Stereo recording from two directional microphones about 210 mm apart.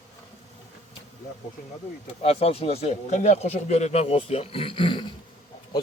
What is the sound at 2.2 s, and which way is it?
Speech, 30° left (ahead or behind).